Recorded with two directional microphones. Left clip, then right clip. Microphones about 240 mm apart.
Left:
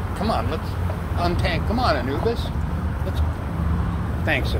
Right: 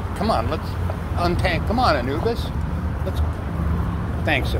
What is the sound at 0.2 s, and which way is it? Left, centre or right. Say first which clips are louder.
Speech: right 3 dB; right.